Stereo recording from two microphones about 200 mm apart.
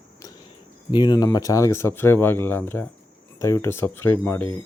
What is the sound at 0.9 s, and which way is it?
Speech, 20° left (ahead or behind).